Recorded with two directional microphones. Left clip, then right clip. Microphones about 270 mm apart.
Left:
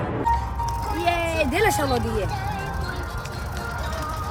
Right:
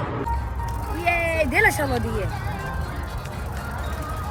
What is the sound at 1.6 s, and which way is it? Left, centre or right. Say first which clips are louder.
Speech: right 2 dB; centre.